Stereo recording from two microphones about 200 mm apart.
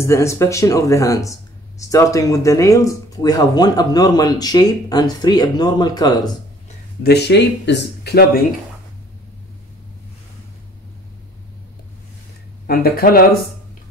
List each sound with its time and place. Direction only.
0.0 s speech: 15° left (ahead or behind)
7.0 s speech: 55° left (ahead or behind)
12.6 s speech: 50° left (ahead or behind)